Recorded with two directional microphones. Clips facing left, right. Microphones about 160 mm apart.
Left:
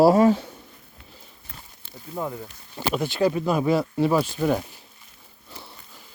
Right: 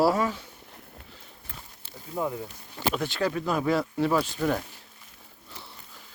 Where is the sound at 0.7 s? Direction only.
60° right (ahead or behind).